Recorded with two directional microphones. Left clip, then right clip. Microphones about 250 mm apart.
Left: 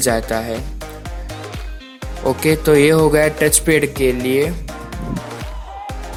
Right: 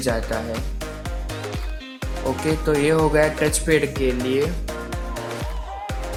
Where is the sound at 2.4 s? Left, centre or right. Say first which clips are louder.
Left 8 dB; left.